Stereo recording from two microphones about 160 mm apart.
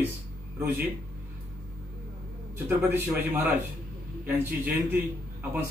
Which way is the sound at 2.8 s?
10° right (ahead or behind).